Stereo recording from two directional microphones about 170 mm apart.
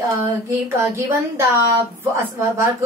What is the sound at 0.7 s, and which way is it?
A woman's voice, 15° right (ahead or behind).